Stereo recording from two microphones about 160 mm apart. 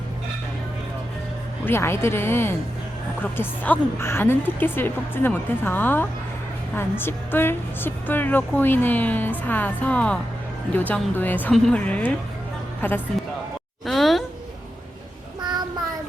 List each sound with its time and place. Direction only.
1.6 s a woman's voice: 15° left (ahead or behind)
13.8 s a sound: centre (ahead or behind)
15.4 s child singing: 25° right (ahead or behind)